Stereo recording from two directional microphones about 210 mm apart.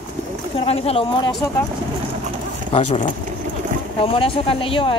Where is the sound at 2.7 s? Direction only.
35° left (ahead or behind).